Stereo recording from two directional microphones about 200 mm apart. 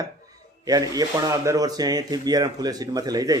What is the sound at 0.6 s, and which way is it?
A man's voice, 20° right (ahead or behind).